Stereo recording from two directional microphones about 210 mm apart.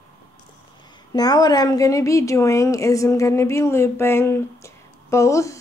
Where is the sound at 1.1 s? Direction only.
20° left (ahead or behind).